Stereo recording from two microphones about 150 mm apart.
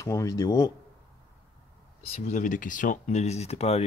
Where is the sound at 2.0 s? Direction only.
45° left (ahead or behind).